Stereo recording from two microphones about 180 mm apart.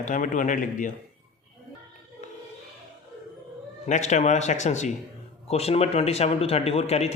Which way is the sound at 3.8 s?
40° left (ahead or behind).